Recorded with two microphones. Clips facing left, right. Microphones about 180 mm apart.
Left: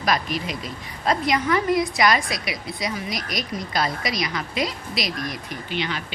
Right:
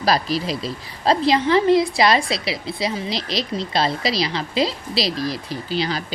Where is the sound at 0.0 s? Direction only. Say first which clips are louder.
Right 4 dB; 35° right (ahead or behind).